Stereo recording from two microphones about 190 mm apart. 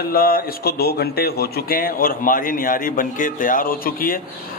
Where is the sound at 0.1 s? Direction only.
50° left (ahead or behind).